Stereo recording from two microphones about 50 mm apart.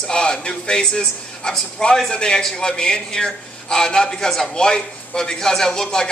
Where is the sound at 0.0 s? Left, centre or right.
Centre.